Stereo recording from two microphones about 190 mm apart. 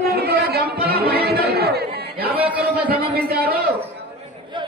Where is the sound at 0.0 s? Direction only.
55° right (ahead or behind).